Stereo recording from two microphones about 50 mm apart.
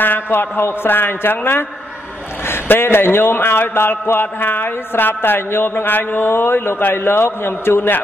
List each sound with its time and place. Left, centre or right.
0.0 s speech: left